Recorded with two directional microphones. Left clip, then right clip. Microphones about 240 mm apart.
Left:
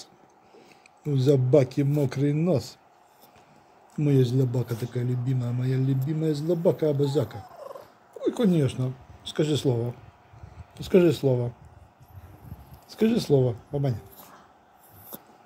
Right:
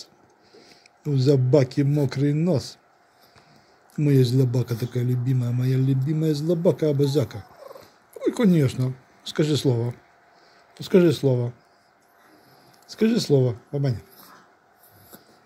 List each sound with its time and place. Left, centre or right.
1.0 s speech: centre
3.9 s a man's voice: centre
12.9 s speech: centre